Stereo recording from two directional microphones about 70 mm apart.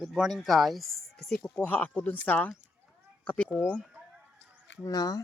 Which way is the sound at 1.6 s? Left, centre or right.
Left.